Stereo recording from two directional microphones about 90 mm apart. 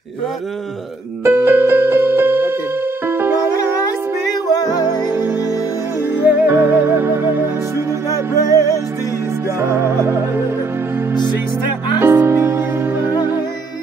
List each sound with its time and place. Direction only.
1.2 s music: 25° right (ahead or behind)
6.2 s music: 25° right (ahead or behind)
8.1 s music: 40° left (ahead or behind)
9.6 s music: 30° right (ahead or behind)
11.1 s music: 55° left (ahead or behind)
12.0 s music: 25° right (ahead or behind)